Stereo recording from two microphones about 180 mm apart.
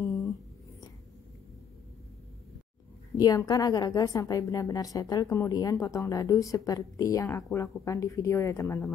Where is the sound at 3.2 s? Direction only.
20° left (ahead or behind).